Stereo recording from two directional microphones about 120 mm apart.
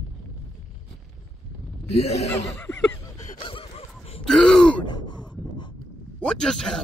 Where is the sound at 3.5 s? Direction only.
50° left (ahead or behind).